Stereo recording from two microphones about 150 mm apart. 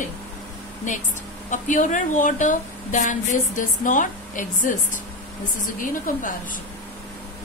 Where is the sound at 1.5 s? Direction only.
55° left (ahead or behind).